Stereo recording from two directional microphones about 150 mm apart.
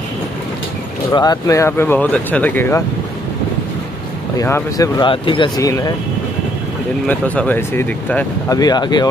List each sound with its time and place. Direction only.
1.1 s speech: 25° left (ahead or behind)
4.4 s speech: 20° left (ahead or behind)
7.1 s speech: 10° left (ahead or behind)
8.5 s speech: 25° left (ahead or behind)